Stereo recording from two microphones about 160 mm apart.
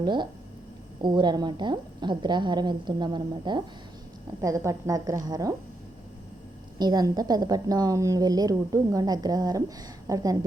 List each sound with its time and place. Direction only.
0.0 s a woman's voice: 30° right (ahead or behind)
6.7 s a woman's voice: 25° right (ahead or behind)